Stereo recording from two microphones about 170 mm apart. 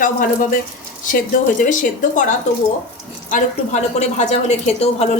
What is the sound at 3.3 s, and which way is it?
Speech, 40° left (ahead or behind).